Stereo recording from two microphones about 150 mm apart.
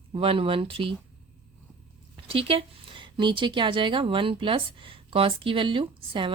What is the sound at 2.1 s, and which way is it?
A woman's voice, 35° right (ahead or behind).